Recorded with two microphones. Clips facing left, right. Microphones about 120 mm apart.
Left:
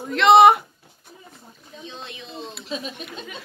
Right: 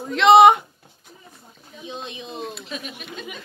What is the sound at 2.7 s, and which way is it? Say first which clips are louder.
Speech: left 2 dB; 30° left (ahead or behind).